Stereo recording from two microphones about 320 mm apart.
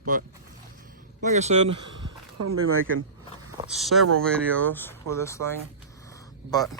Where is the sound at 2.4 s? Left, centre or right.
Right.